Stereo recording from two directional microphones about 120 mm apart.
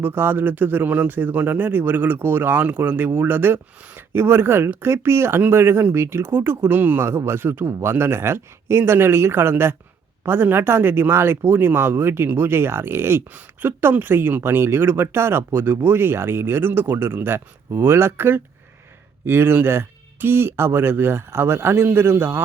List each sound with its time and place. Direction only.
0.0 s speech: 20° right (ahead or behind)